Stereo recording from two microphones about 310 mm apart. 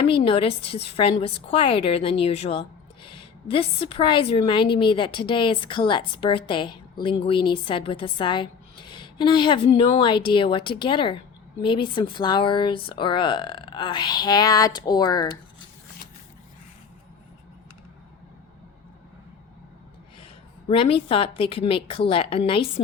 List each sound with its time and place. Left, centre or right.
0.0 s a woman's voice: centre
20.7 s a woman's voice: centre